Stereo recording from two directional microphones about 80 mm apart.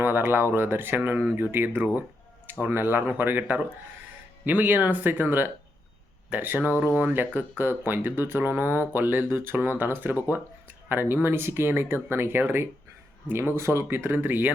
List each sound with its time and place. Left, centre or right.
0.0 s speech: right